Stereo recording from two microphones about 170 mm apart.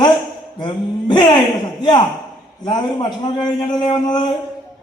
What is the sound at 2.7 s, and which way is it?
A man's voice, 25° left (ahead or behind).